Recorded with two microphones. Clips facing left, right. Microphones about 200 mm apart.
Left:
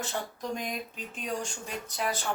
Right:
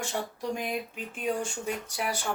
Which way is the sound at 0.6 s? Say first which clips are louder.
Right 3 dB; 10° right (ahead or behind).